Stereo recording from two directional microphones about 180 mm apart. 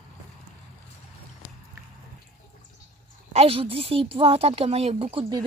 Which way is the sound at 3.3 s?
30° right (ahead or behind).